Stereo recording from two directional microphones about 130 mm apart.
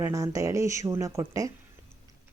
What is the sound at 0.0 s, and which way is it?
Speech, 25° right (ahead or behind).